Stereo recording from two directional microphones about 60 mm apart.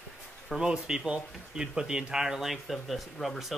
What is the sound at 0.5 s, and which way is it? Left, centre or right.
Speech, centre.